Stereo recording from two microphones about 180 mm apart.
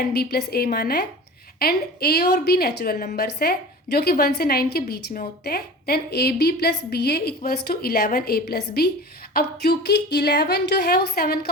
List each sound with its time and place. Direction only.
0.1 s a woman's voice: 60° left (ahead or behind)